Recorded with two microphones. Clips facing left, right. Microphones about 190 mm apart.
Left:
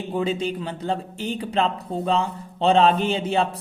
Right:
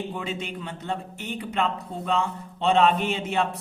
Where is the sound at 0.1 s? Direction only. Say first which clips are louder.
Left 8 dB; 35° left (ahead or behind).